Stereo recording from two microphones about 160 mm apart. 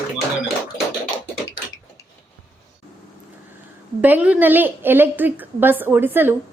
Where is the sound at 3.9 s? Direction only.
10° right (ahead or behind).